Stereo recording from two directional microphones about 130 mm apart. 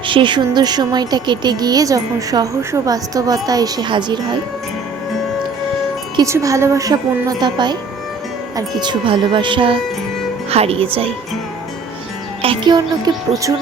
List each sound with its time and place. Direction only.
0.1 s speech: 40° right (ahead or behind)
6.2 s a woman's voice: 25° right (ahead or behind); by 9.7 s 40° right (ahead or behind)
10.5 s speech: 50° right (ahead or behind)
12.4 s speech: 40° right (ahead or behind)